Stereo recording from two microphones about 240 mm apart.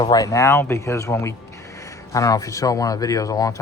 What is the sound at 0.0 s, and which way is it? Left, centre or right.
Speech, centre.